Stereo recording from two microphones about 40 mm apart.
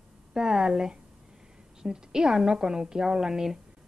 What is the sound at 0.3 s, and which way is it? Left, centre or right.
A woman's voice, centre.